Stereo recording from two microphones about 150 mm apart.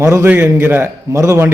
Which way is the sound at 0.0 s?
15° right (ahead or behind).